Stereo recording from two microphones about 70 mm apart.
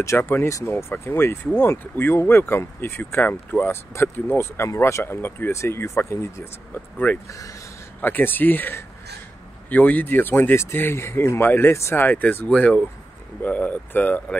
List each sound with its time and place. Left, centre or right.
0.2 s speech: left
0.5 s speech: left
6.7 s speech: left
7.2 s speech: left
8.0 s speech: left